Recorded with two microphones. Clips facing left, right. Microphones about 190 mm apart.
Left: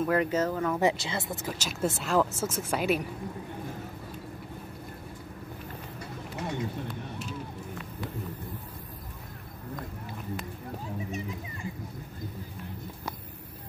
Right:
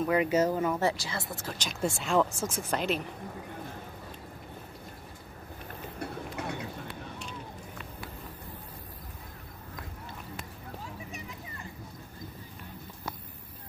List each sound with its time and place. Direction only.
0.0 s speech: centre (ahead or behind)
0.3 s speech: 15° right (ahead or behind)
0.7 s speech: 20° left (ahead or behind)
1.5 s speech: 5° left (ahead or behind)
5.9 s a sound: 60° right (ahead or behind)